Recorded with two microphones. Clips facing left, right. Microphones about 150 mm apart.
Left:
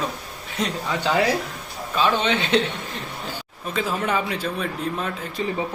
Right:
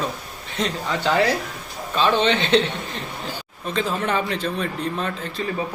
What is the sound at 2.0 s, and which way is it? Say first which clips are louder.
Speech: right 2 dB; 10° left (ahead or behind).